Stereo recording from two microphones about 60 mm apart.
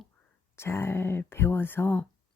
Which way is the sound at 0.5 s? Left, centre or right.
Left.